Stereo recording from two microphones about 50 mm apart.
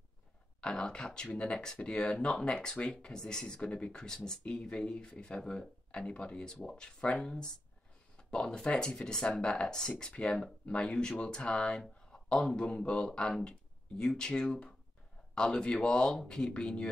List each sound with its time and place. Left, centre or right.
0.6 s speech: centre